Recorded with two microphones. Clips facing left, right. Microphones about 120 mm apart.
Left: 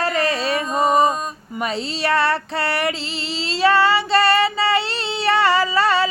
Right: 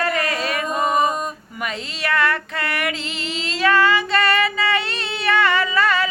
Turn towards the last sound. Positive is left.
turn(degrees=30)  # may be behind; listen again after turning